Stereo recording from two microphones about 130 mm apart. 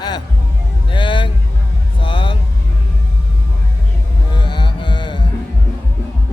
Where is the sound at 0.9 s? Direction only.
40° left (ahead or behind).